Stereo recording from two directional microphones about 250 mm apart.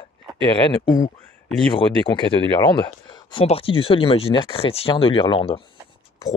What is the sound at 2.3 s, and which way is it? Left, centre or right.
Speech, centre.